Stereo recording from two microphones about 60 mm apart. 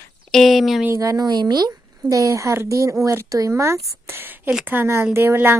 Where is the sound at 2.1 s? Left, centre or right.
Right.